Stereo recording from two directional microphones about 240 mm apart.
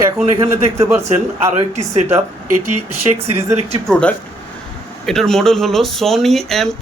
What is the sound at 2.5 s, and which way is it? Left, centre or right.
Speech, right.